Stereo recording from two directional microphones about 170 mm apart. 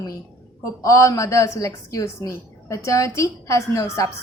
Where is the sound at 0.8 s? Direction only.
20° left (ahead or behind).